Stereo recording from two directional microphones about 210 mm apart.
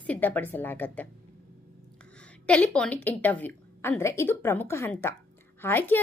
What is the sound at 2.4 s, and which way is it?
A woman's voice, 5° left (ahead or behind).